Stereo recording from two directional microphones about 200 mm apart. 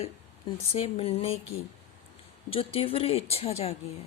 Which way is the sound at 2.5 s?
30° left (ahead or behind).